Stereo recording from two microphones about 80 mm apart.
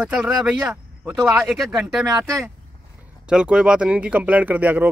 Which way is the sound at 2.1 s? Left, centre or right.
Right.